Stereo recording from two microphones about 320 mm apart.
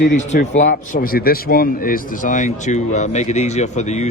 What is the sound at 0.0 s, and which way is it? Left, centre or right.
Speech, left.